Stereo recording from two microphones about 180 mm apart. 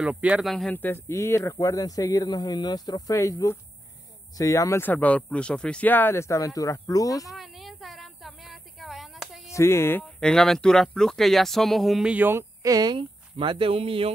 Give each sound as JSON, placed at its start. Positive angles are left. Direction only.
{"t": 0.0, "sound": "speech", "side_deg": -5}
{"t": 7.2, "sound": "a sound", "side_deg": 0}
{"t": 9.5, "sound": "speech", "side_deg": 15}